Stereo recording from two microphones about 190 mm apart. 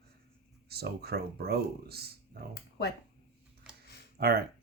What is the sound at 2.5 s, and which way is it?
Speech, 60° left (ahead or behind).